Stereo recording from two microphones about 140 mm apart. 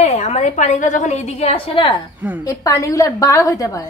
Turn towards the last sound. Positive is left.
turn(degrees=25)  # may be behind; listen again after turning